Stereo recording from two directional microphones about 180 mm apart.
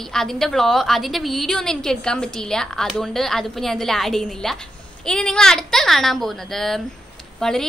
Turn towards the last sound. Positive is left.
turn(degrees=0)  # may be behind; listen again after turning